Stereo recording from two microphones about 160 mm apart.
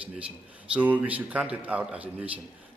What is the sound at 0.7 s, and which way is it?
A man's voice, 10° right (ahead or behind).